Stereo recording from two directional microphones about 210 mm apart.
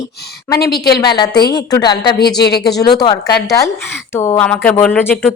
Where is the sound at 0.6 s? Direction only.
50° left (ahead or behind).